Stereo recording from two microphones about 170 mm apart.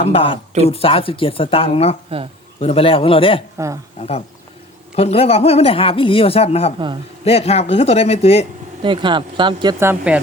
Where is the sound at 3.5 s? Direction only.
20° right (ahead or behind).